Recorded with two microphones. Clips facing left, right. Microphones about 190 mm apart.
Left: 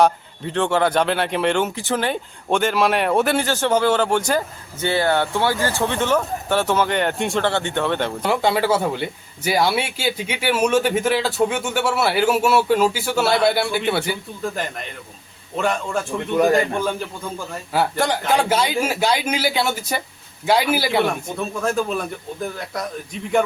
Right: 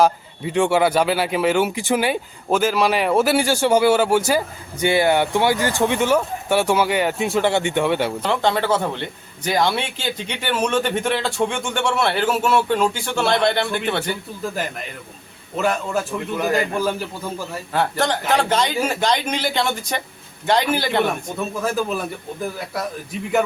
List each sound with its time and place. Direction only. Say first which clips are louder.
0.0 s speech: even; 10° right (ahead or behind)
8.2 s a man's voice: left 1 dB; 10° left (ahead or behind)
14.5 s a man's voice: right 1 dB; 5° right (ahead or behind)
17.7 s a man's voice: left 1 dB; 10° left (ahead or behind)